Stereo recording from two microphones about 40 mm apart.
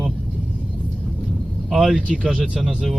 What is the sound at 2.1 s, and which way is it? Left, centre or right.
Speech, right.